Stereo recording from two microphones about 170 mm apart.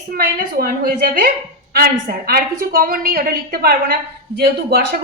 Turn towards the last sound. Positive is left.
turn(degrees=-65)  # may be behind; listen again after turning